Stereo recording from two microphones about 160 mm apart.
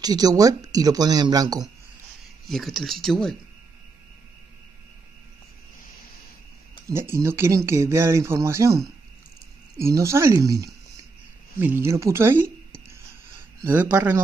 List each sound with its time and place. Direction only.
0.0 s speech: 25° right (ahead or behind)
2.4 s speech: centre (ahead or behind)
6.9 s speech: 15° right (ahead or behind)
13.6 s speech: 15° right (ahead or behind)